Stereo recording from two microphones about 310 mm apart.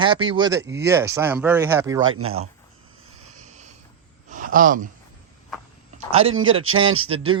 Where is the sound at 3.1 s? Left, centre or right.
Right.